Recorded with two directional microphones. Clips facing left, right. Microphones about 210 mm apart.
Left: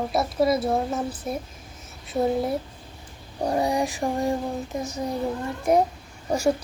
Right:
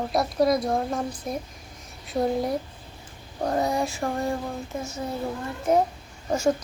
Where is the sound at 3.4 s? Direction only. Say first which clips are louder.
Left 1 dB; 15° left (ahead or behind).